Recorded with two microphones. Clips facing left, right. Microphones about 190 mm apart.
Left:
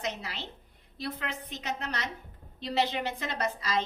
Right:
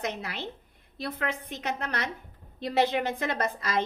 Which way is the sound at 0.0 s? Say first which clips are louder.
Right 3 dB; 55° right (ahead or behind).